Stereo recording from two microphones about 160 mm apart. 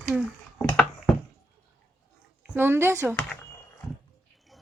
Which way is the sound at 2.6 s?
15° right (ahead or behind).